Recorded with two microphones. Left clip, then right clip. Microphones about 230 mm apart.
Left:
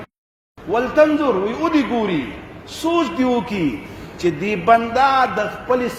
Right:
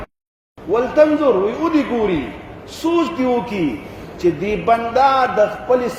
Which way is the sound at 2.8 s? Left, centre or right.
Left.